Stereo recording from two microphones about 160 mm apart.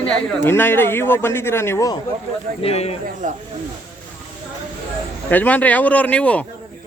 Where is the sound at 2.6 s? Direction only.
40° left (ahead or behind).